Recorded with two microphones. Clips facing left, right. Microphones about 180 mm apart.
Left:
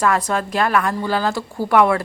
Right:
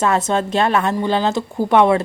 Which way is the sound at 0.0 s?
25° right (ahead or behind).